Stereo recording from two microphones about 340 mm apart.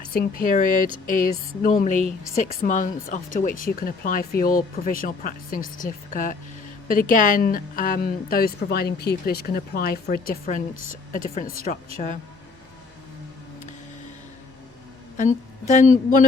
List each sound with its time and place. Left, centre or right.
0.1 s a woman's voice: left
15.7 s a woman's voice: left